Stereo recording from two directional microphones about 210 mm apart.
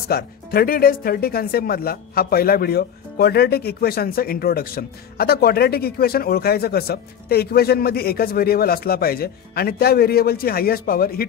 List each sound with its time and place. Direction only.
0.1 s speech: 45° left (ahead or behind)